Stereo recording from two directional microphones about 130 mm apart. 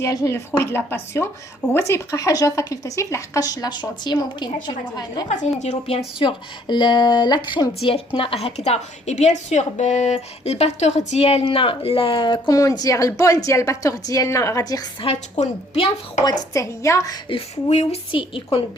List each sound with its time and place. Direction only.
0.0 s speech: 25° left (ahead or behind)
5.4 s a woman's voice: 65° left (ahead or behind)
6.1 s speech: 35° left (ahead or behind)
7.7 s a woman's voice: 45° left (ahead or behind); by 14.8 s 30° left (ahead or behind)
15.0 s a woman's voice: 55° left (ahead or behind)
16.2 s speech: 25° left (ahead or behind)
17.2 s a woman's voice: 50° left (ahead or behind)
18.1 s speech: 40° left (ahead or behind)